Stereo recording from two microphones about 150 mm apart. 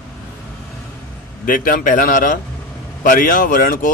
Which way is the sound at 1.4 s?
65° left (ahead or behind).